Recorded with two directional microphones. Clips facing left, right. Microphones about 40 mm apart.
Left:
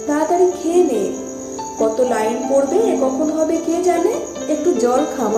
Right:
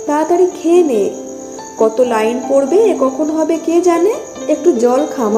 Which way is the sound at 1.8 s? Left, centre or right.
Right.